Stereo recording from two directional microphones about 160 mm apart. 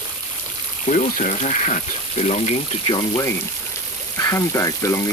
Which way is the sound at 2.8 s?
35° left (ahead or behind).